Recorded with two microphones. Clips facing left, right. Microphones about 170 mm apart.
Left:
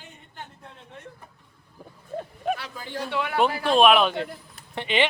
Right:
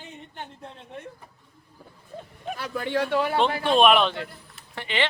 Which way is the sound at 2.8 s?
70° right (ahead or behind).